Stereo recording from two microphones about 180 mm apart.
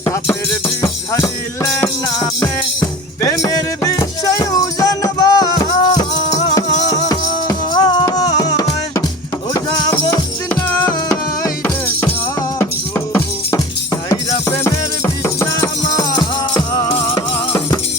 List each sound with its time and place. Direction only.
0.0 s music: 15° left (ahead or behind)
1.8 s music: 15° left (ahead or behind)
10.8 s music: 15° left (ahead or behind)